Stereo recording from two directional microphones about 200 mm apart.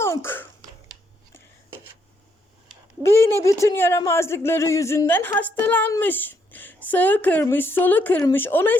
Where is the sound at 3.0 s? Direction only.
15° left (ahead or behind).